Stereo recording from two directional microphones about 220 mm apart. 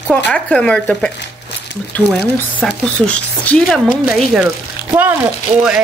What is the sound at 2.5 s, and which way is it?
Speech, 5° left (ahead or behind).